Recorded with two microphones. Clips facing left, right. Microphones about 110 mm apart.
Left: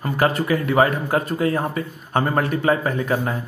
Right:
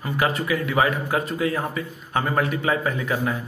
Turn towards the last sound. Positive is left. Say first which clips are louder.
# left 2 dB
turn(degrees=35)  # may be behind; listen again after turning